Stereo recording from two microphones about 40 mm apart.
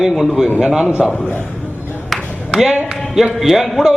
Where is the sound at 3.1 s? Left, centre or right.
Centre.